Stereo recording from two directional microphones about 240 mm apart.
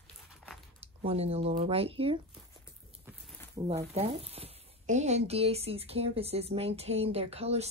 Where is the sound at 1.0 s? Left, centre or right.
Right.